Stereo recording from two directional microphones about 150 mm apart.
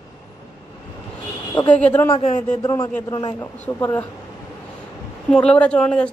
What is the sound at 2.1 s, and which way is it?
Speech, 50° left (ahead or behind).